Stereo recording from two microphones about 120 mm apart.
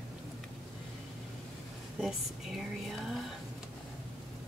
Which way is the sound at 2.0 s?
Centre (ahead or behind).